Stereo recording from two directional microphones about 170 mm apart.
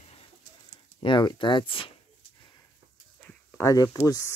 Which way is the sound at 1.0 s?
30° left (ahead or behind).